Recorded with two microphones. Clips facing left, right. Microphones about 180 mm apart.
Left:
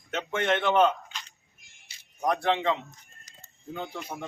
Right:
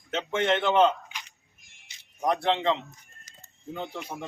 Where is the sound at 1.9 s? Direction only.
20° right (ahead or behind).